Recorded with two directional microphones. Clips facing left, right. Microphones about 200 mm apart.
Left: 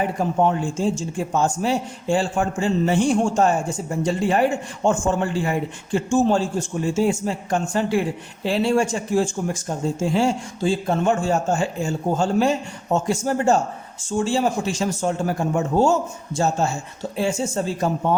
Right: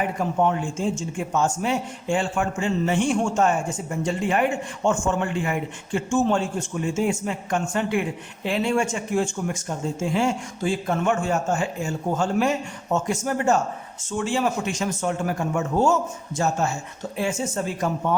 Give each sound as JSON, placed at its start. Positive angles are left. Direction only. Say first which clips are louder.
{"t": 0.2, "sound": "speech", "louder": "left 2 dB", "side_deg": 35}